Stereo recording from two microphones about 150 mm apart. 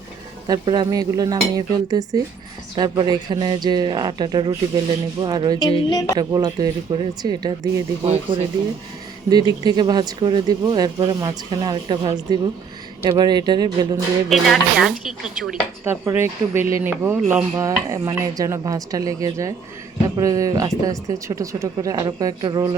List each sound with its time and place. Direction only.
0.4 s speech: 25° right (ahead or behind)
5.9 s a woman's voice: 25° left (ahead or behind)
6.1 s speech: 25° right (ahead or behind)
8.0 s speech: 45° right (ahead or behind)
9.3 s speech: 25° right (ahead or behind)
14.3 s speech: centre (ahead or behind)
15.8 s speech: 15° right (ahead or behind)